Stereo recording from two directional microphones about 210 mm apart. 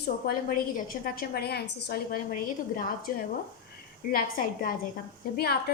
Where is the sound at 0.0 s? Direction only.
45° left (ahead or behind).